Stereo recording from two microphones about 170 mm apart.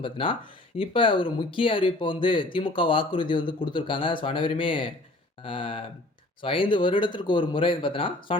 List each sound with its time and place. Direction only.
0.0 s speech: 30° left (ahead or behind)